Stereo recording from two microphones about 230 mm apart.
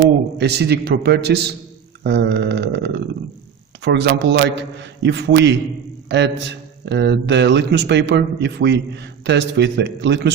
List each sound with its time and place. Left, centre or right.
0.3 s a man's voice: right